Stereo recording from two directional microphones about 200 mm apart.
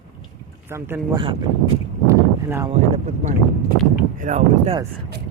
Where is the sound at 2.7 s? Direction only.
35° right (ahead or behind).